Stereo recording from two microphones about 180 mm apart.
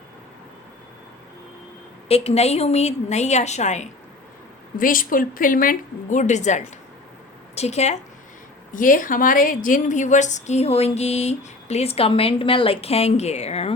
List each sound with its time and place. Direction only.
2.0 s a woman's voice: 35° left (ahead or behind)
4.8 s a woman's voice: 50° left (ahead or behind)
8.7 s a woman's voice: 50° left (ahead or behind)